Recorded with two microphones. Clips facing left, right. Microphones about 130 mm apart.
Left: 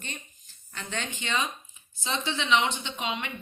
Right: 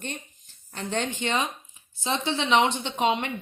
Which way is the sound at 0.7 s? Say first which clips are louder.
Right 7 dB; 35° right (ahead or behind).